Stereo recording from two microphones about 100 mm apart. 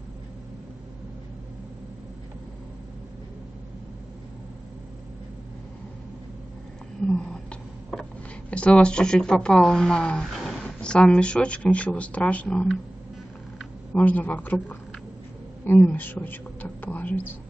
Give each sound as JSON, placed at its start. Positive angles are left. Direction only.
{"t": 7.1, "sound": "a sound", "side_deg": 10}
{"t": 7.9, "sound": "speech", "side_deg": 10}
{"t": 13.9, "sound": "a woman's voice", "side_deg": 15}